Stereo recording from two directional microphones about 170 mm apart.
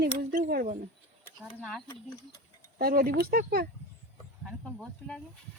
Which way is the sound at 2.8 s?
60° right (ahead or behind).